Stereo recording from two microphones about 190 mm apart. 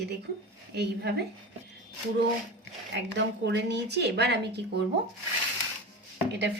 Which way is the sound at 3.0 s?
65° right (ahead or behind).